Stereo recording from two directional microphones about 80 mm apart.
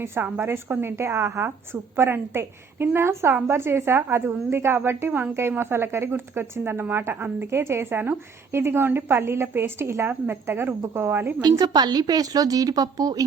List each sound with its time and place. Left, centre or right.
0.2 s a woman's voice: right
11.3 s a woman's voice: right